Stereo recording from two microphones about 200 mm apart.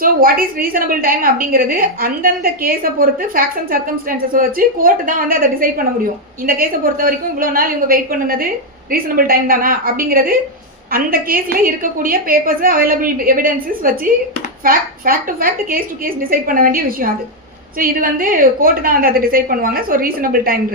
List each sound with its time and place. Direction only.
0.0 s a woman's voice: 45° right (ahead or behind)